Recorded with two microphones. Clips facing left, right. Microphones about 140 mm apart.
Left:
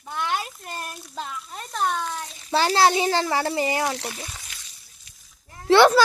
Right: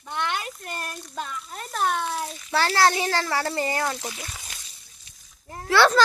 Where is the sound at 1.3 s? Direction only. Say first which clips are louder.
Even; centre (ahead or behind).